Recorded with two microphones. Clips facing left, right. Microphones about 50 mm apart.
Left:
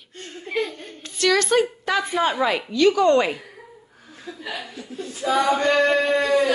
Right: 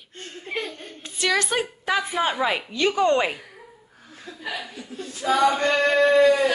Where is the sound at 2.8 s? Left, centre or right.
Right.